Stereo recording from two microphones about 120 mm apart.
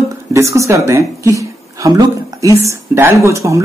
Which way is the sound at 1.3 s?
30° right (ahead or behind).